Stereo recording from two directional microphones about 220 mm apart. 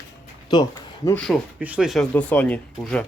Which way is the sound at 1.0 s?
5° left (ahead or behind).